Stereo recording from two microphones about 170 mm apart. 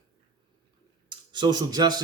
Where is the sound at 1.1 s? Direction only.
25° right (ahead or behind).